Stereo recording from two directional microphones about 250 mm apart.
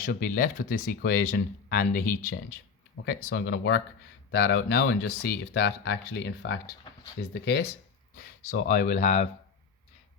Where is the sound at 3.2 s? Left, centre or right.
Left.